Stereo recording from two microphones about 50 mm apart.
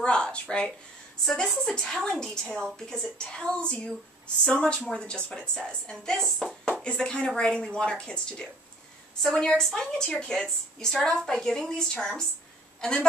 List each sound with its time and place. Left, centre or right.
0.0 s speech: left
1.2 s speech: centre
6.8 s speech: left